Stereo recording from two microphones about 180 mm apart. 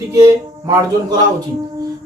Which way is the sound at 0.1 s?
20° right (ahead or behind).